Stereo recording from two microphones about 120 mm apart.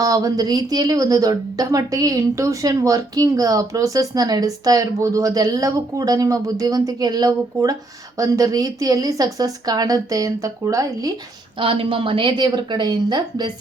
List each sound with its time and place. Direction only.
0.0 s speech: 30° right (ahead or behind)
11.6 s speech: 50° right (ahead or behind)